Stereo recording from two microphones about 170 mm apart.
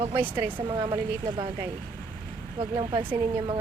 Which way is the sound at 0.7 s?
25° right (ahead or behind).